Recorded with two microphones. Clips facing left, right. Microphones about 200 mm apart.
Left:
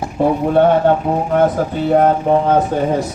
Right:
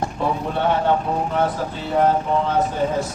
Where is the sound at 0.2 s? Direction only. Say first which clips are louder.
Left 11 dB; 50° left (ahead or behind).